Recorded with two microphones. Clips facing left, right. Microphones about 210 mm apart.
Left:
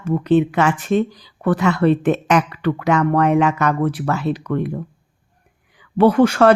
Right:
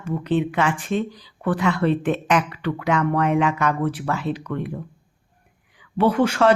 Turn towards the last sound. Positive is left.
turn(degrees=45)  # may be behind; listen again after turning